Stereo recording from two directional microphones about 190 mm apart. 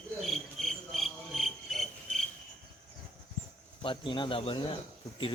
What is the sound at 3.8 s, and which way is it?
Speech, 25° left (ahead or behind).